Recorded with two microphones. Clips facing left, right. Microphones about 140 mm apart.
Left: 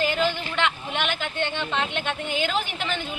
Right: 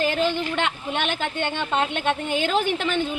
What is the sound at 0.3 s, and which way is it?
A woman's voice, 50° right (ahead or behind).